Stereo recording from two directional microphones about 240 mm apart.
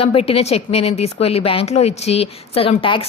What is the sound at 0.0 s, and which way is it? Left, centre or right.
A woman's voice, left.